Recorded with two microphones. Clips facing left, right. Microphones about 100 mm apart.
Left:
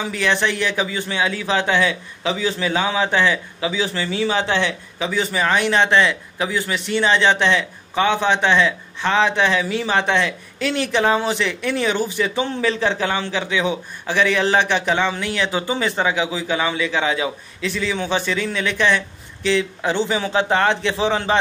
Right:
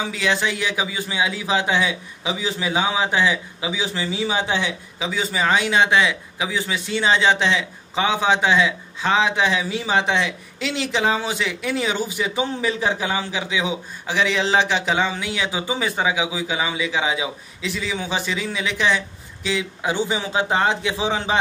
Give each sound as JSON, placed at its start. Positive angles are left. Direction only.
{"t": 0.2, "sound": "a man's voice", "side_deg": -15}